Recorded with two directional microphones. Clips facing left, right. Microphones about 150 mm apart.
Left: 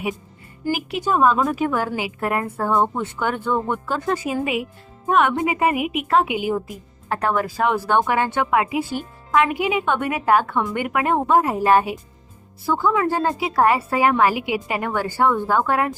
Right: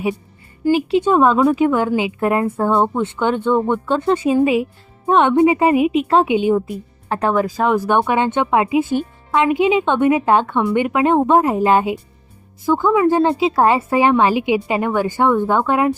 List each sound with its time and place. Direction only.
0.7 s a woman's voice: 30° right (ahead or behind)